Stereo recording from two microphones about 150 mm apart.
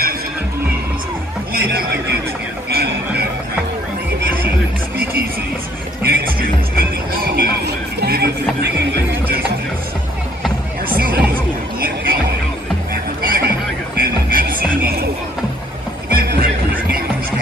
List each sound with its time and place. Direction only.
1.5 s chatter: 85° right
2.7 s music: 90° right
6.0 s music: 80° right
10.9 s music: 75° right (ahead or behind)
13.2 s a sound: 75° right (ahead or behind)
13.9 s music: 80° right
16.1 s music: 80° right